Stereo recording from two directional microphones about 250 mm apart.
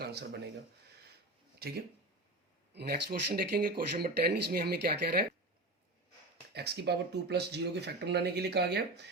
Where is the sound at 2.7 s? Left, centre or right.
Right.